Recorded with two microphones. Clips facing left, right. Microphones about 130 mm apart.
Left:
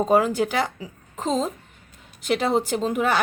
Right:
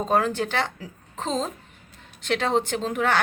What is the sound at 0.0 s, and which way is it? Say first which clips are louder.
A woman's voice: left 4 dB; 10° left (ahead or behind).